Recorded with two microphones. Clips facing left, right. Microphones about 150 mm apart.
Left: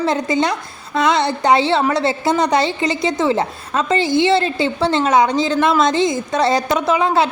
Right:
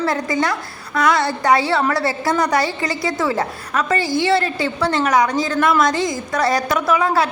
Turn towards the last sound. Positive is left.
turn(degrees=25)  # may be behind; listen again after turning